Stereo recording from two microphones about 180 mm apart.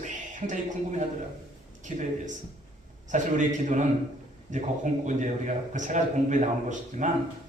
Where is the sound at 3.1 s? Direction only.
45° right (ahead or behind).